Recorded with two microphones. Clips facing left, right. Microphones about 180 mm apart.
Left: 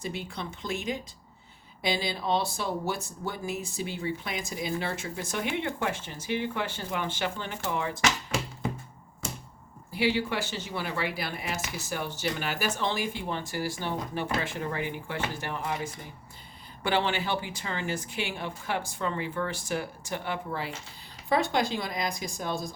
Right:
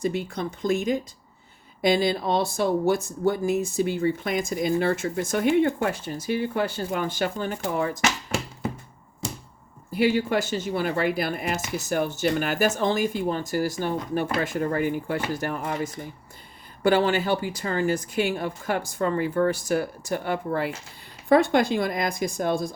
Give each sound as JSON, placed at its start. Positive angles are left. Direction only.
{"t": 0.0, "sound": "speech", "side_deg": -45}
{"t": 9.9, "sound": "speech", "side_deg": -45}